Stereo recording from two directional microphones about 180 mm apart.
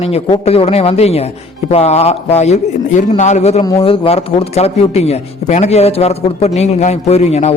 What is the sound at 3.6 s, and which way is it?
A man's voice, 25° left (ahead or behind).